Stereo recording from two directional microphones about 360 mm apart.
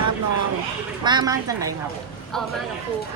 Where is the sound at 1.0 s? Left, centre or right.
Centre.